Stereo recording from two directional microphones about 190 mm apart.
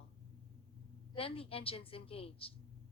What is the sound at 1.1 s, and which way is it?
A woman's voice, 30° left (ahead or behind).